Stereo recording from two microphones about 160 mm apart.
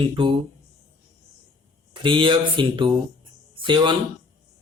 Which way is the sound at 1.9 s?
30° right (ahead or behind).